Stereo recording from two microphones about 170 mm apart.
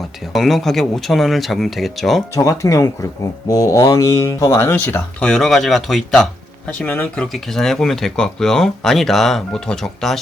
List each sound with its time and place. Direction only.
0.3 s speech: centre (ahead or behind)
2.3 s speech: 20° left (ahead or behind); by 10.2 s centre (ahead or behind)